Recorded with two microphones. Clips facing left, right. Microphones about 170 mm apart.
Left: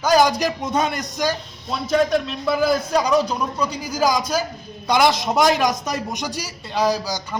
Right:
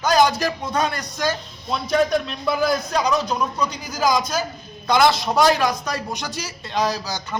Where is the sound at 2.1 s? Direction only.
Centre (ahead or behind).